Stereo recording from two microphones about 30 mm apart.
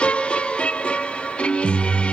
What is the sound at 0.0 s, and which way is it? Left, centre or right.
Music, left.